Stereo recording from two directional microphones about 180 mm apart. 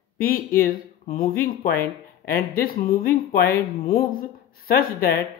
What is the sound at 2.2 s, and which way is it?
Speech, 55° left (ahead or behind).